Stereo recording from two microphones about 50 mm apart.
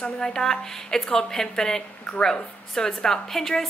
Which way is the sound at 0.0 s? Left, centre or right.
Centre.